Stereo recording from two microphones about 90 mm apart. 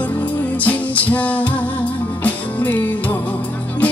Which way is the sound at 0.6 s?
15° left (ahead or behind).